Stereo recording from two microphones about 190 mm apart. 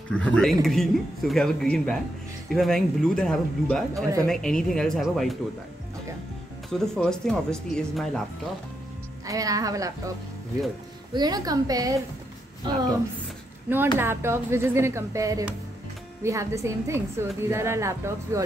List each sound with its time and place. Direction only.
0.1 s speech: 5° left (ahead or behind)
3.9 s a woman's voice: 15° right (ahead or behind)
4.3 s speech: 5° left (ahead or behind)
6.7 s speech: 5° left (ahead or behind)
9.2 s a woman's voice: 20° right (ahead or behind)
11.1 s a woman's voice: 20° right (ahead or behind)
13.9 s a woman's voice: 15° right (ahead or behind)